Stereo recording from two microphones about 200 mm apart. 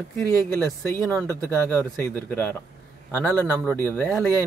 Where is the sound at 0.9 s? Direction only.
10° left (ahead or behind).